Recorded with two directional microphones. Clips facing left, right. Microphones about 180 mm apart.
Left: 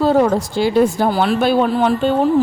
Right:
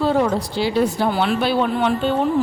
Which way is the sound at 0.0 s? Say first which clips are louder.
Left 4 dB; 40° left (ahead or behind).